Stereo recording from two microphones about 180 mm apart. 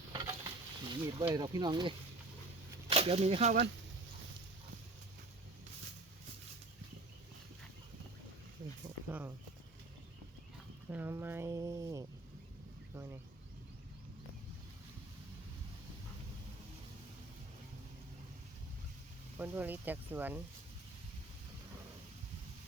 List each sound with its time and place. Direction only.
0.1 s sizzle: 25° right (ahead or behind)
2.8 s speech: 35° right (ahead or behind)
9.0 s speech: 10° right (ahead or behind)
10.8 s speech: 10° right (ahead or behind)
12.9 s a sound: 15° right (ahead or behind)
19.4 s speech: 10° right (ahead or behind)